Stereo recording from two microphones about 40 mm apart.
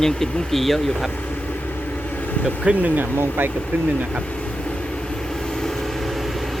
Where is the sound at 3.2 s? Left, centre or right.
Right.